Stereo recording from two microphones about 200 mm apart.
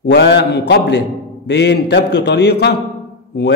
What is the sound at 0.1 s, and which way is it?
A man's voice, 60° left (ahead or behind).